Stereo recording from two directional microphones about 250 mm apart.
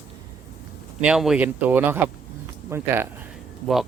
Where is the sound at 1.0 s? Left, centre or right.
Centre.